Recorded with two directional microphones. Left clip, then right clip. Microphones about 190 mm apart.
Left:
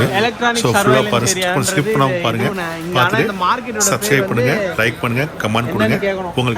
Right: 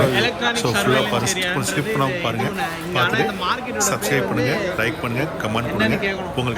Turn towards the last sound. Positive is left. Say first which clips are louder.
# left 4 dB
turn(degrees=0)  # may be behind; listen again after turning